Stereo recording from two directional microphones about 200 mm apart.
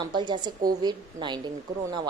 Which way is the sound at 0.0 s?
20° right (ahead or behind).